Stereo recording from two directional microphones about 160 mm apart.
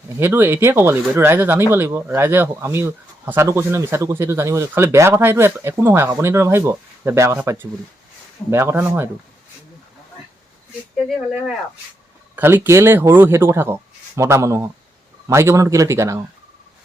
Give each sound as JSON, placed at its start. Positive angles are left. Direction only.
{"t": 0.2, "sound": "speech", "side_deg": -15}
{"t": 10.9, "sound": "speech", "side_deg": -5}
{"t": 12.4, "sound": "speech", "side_deg": -15}